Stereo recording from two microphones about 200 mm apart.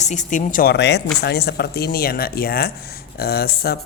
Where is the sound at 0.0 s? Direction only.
35° left (ahead or behind).